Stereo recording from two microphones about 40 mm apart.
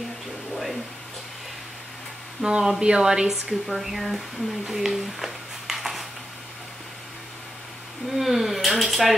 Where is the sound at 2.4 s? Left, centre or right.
Right.